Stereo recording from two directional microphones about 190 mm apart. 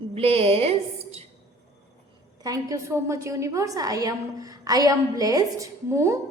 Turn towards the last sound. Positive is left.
turn(degrees=-15)  # may be behind; listen again after turning